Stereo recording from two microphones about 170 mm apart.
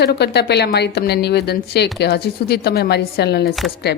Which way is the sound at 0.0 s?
75° left (ahead or behind).